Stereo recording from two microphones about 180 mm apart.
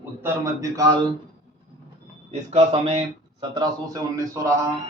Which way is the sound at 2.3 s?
40° right (ahead or behind).